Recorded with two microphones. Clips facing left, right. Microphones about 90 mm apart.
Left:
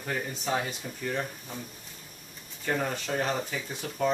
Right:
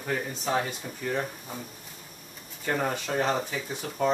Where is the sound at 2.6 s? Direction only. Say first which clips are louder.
Right 2 dB; 10° right (ahead or behind).